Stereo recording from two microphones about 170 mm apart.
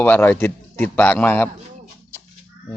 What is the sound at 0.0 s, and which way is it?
A man's voice, 10° left (ahead or behind).